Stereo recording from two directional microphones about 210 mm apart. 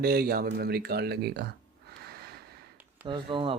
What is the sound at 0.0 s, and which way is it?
Speech, 45° right (ahead or behind).